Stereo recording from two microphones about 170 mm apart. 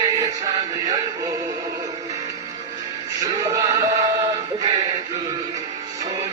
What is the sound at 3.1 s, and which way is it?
Music, 25° right (ahead or behind).